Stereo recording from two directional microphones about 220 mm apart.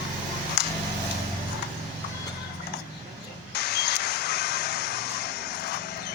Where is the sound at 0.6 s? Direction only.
50° left (ahead or behind).